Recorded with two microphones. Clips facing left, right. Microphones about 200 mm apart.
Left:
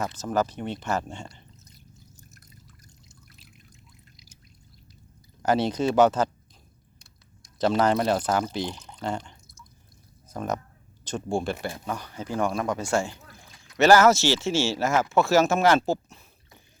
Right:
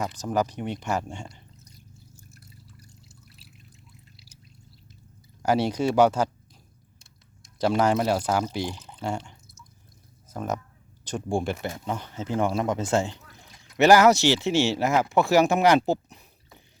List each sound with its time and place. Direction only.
0.0 s speech: 15° right (ahead or behind)
2.4 s drip: 10° right (ahead or behind)
5.4 s speech: 10° right (ahead or behind)
7.6 s speech: 10° right (ahead or behind)